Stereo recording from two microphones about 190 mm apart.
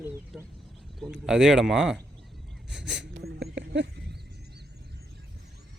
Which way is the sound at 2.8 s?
65° right (ahead or behind).